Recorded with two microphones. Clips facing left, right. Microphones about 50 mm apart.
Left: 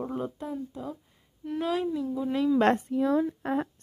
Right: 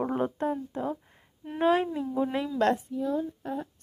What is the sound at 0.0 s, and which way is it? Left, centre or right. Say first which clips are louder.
Speech: right 5 dB; right.